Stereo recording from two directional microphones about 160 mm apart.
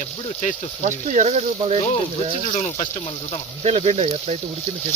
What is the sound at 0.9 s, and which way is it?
Speech, 50° right (ahead or behind).